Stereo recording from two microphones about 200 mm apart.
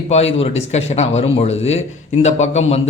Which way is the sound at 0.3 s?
35° left (ahead or behind).